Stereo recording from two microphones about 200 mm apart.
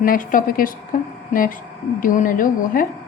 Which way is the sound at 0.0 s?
45° left (ahead or behind).